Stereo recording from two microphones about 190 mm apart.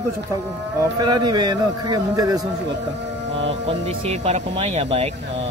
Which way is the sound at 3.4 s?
30° right (ahead or behind).